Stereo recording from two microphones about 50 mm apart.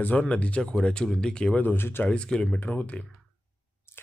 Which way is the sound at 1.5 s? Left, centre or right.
Left.